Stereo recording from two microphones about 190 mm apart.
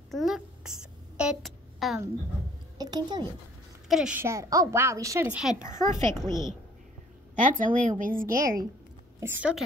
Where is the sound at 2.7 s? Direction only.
20° right (ahead or behind).